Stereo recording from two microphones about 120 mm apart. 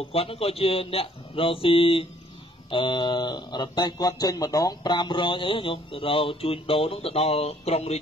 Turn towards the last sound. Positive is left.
turn(degrees=65)  # may be behind; listen again after turning